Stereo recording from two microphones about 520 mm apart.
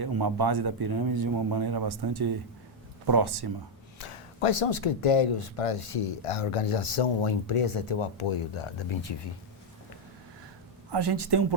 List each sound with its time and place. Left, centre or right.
0.0 s a man's voice: right
3.9 s speech: left
10.9 s a man's voice: right